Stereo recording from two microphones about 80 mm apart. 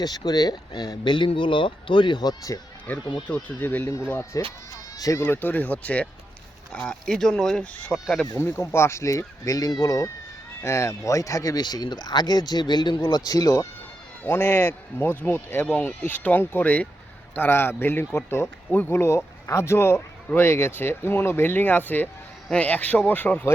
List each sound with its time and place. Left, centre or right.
0.0 s speech: left
2.5 s speech: left
2.9 s speech: centre
4.2 s speech: left
5.2 s speech: left
7.0 s speech: centre
7.6 s speech: centre
7.9 s speech: centre
8.5 s speech: left
10.6 s speech: left
11.6 s speech: left
14.3 s speech: left